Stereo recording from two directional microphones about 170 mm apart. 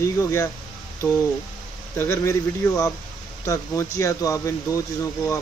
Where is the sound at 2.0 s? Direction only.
15° left (ahead or behind).